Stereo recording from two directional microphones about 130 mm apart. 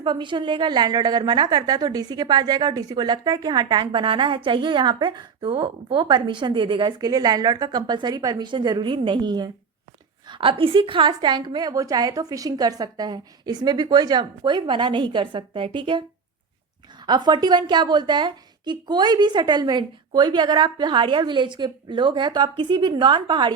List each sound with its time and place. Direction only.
0.0 s a woman's voice: 40° right (ahead or behind)
17.1 s a woman's voice: 35° right (ahead or behind)